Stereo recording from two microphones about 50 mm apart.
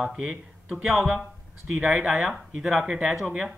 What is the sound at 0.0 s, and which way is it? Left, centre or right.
Speech, centre.